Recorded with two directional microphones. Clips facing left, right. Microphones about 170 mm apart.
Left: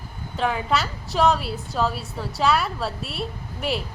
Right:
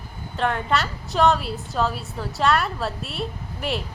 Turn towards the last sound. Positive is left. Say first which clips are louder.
# left 1 dB
turn(degrees=0)  # may be behind; listen again after turning